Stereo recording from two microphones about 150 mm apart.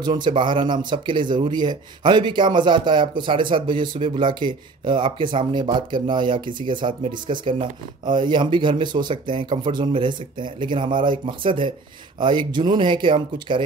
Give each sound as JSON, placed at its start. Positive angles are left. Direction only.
{"t": 0.0, "sound": "speech", "side_deg": -30}